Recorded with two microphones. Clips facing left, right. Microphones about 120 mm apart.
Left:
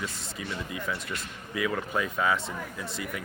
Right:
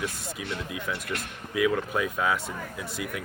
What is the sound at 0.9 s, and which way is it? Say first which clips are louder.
Speech: right 2 dB; 65° right (ahead or behind).